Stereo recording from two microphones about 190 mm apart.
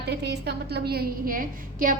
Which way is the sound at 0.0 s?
60° right (ahead or behind).